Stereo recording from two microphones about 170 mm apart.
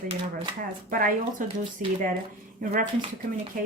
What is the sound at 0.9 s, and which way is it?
Speech, 55° right (ahead or behind).